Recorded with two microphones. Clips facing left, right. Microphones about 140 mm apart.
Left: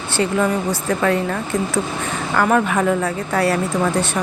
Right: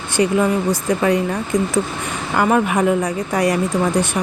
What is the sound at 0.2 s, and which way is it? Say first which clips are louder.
Speech: right 2 dB; 10° right (ahead or behind).